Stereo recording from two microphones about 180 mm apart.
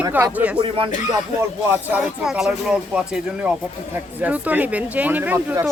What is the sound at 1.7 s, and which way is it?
Speech, 5° right (ahead or behind).